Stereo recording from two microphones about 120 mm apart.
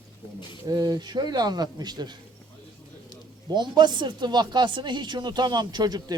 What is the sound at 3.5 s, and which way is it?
Speech, 40° right (ahead or behind).